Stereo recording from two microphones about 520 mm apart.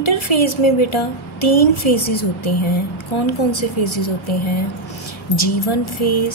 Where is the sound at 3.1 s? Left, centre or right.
Left.